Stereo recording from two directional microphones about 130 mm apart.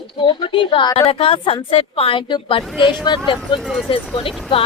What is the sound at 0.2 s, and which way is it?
A woman's voice, 40° left (ahead or behind).